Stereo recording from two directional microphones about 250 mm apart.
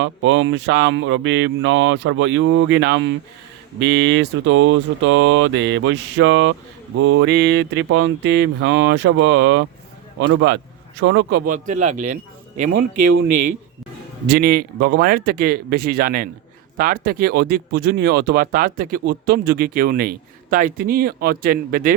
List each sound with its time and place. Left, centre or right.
0.0 s speech: right
12.9 s speech: right
14.3 s speech: right